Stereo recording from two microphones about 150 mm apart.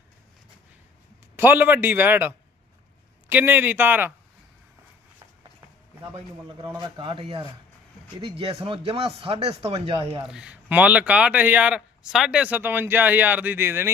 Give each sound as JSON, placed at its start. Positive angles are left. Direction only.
{"t": 1.4, "sound": "speech", "side_deg": -15}
{"t": 6.7, "sound": "speech", "side_deg": -25}
{"t": 10.2, "sound": "speech", "side_deg": -5}